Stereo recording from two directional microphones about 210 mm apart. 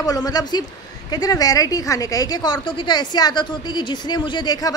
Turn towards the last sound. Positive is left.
turn(degrees=20)  # may be behind; listen again after turning